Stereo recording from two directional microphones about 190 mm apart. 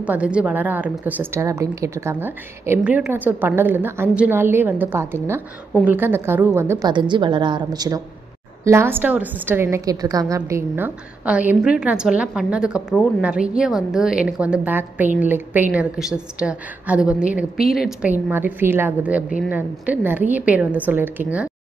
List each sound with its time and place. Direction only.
0.0 s a woman's voice: 5° right (ahead or behind)